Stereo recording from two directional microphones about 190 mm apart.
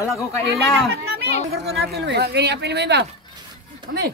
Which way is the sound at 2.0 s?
60° right (ahead or behind).